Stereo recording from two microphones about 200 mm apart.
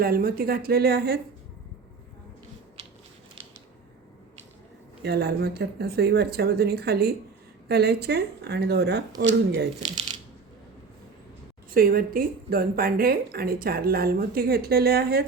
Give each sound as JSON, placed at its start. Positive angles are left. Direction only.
{"t": 0.0, "sound": "a woman's voice", "side_deg": -50}
{"t": 2.8, "sound": "a sound", "side_deg": -30}
{"t": 5.0, "sound": "a woman's voice", "side_deg": -55}
{"t": 11.7, "sound": "a woman's voice", "side_deg": -45}